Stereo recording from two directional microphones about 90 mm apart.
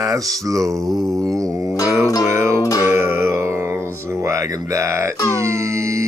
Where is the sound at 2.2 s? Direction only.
30° right (ahead or behind).